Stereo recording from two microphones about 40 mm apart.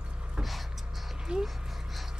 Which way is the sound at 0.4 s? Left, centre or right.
Centre.